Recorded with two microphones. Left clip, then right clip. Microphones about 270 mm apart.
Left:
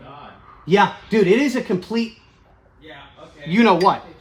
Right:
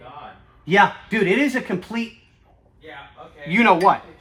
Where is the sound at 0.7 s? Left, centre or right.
Centre.